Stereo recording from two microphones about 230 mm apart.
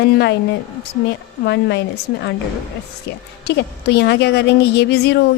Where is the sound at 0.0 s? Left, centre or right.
Left.